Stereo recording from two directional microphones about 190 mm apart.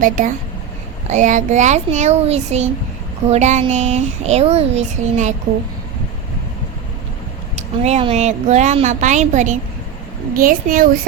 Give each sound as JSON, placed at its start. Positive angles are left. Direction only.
{"t": 0.0, "sound": "a child's voice", "side_deg": -45}
{"t": 7.5, "sound": "a child's voice", "side_deg": -35}